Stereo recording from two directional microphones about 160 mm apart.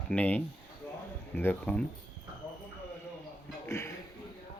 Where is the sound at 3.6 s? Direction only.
15° left (ahead or behind).